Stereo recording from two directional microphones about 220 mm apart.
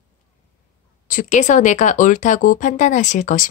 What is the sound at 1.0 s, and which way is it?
A woman's voice, 35° left (ahead or behind).